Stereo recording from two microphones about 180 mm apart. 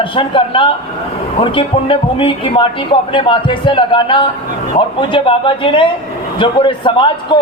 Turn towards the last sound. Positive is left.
turn(degrees=25)  # may be behind; listen again after turning